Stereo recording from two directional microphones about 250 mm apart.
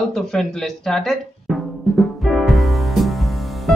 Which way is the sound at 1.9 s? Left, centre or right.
Centre.